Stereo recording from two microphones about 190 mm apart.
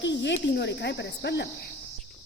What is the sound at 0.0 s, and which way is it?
Speech, 70° left (ahead or behind).